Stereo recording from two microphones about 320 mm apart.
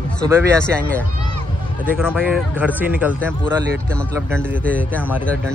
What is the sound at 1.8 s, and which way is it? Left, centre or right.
Speech, centre.